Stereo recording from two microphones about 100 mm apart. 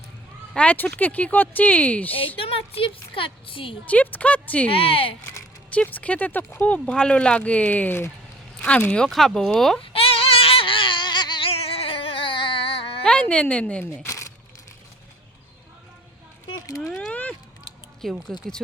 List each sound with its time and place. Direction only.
0.5 s speech: 15° left (ahead or behind)
2.1 s speech: 65° left (ahead or behind)
3.8 s speech: 15° left (ahead or behind)
4.7 s speech: 70° left (ahead or behind)
5.7 s speech: 15° left (ahead or behind)
9.8 s a sound: 70° left (ahead or behind); by 11.4 s 50° left (ahead or behind)
11.4 s a sound: 70° left (ahead or behind)
13.1 s speech: 10° left (ahead or behind)
14.0 s a sound: 30° left (ahead or behind)
16.9 s vehicle: 10° left (ahead or behind)
18.0 s speech: centre (ahead or behind)